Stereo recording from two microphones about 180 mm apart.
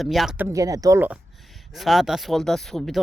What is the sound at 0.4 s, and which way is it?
Speech, 20° right (ahead or behind).